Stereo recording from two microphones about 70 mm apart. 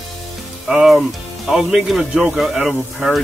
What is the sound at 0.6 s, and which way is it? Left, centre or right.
Speech, centre.